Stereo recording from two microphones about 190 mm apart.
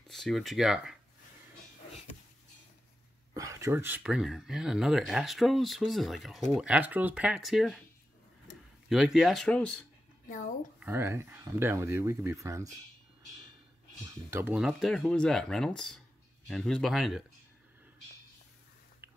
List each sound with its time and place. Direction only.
0.1 s speech: centre (ahead or behind)
3.3 s speech: 15° right (ahead or behind); by 7.8 s centre (ahead or behind)
8.8 s speech: centre (ahead or behind)
10.2 s speech: 45° left (ahead or behind)
10.8 s speech: 10° right (ahead or behind)
14.3 s speech: 5° right (ahead or behind)